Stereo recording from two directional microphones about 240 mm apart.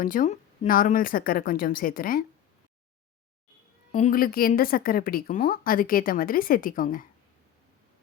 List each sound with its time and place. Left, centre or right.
0.0 s a woman's voice: left
3.9 s a woman's voice: left